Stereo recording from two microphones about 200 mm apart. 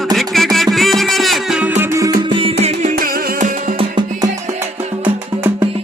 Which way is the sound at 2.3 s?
25° right (ahead or behind).